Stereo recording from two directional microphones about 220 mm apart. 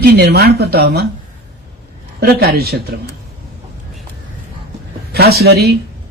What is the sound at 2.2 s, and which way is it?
Speech, 45° right (ahead or behind).